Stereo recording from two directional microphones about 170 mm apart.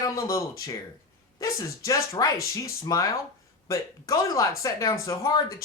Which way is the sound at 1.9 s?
20° left (ahead or behind).